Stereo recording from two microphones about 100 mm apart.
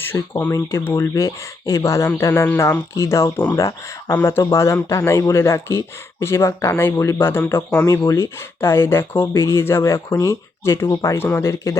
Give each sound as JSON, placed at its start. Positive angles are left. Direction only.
{"t": 0.0, "sound": "speech", "side_deg": 20}